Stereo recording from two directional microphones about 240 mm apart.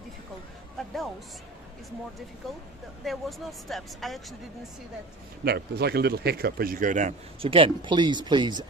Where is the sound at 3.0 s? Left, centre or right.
Centre.